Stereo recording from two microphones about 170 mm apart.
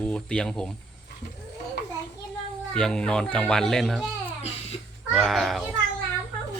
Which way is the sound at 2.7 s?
5° left (ahead or behind).